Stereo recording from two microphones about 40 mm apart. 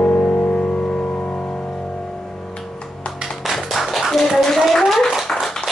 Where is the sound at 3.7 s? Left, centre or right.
Centre.